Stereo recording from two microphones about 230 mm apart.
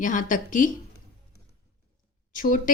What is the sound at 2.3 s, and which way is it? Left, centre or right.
Speech, left.